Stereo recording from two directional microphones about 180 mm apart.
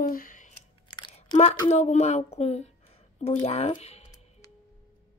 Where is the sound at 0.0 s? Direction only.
50° left (ahead or behind).